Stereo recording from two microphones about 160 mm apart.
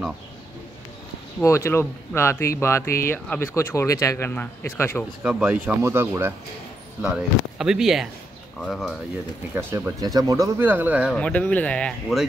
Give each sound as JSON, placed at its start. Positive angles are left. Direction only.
{"t": 1.4, "sound": "speech", "side_deg": 20}
{"t": 5.2, "sound": "speech", "side_deg": -10}
{"t": 7.0, "sound": "speech", "side_deg": -5}
{"t": 9.6, "sound": "speech", "side_deg": -15}
{"t": 11.1, "sound": "speech", "side_deg": 10}